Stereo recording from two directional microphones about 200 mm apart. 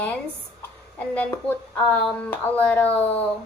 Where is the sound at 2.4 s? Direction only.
10° left (ahead or behind).